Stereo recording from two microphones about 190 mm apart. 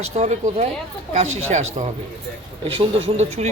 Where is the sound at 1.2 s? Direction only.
90° right.